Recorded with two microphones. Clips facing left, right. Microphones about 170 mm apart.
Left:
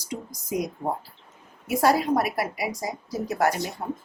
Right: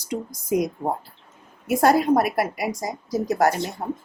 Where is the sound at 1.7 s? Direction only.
50° right (ahead or behind).